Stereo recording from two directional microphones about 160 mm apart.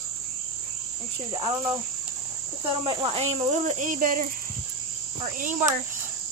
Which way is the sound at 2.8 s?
35° right (ahead or behind).